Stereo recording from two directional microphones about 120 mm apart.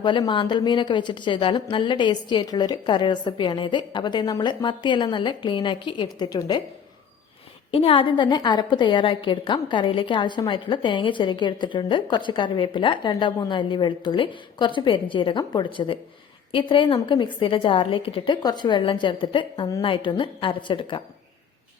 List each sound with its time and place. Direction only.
0.0 s a woman's voice: 40° left (ahead or behind)
7.7 s a woman's voice: 50° left (ahead or behind)